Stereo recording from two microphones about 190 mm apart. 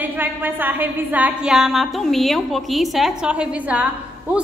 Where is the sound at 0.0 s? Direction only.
10° right (ahead or behind).